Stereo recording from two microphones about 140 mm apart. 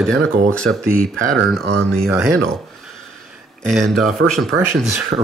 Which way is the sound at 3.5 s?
5° left (ahead or behind).